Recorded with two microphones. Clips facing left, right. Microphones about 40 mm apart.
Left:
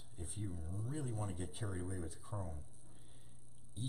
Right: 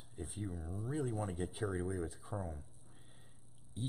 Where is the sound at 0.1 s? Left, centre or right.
Centre.